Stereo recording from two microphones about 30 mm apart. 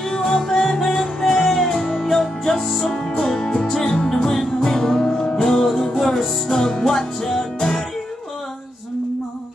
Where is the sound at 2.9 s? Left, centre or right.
Left; by 5.1 s centre.